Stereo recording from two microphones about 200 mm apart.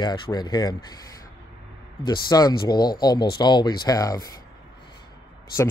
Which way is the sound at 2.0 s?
20° left (ahead or behind).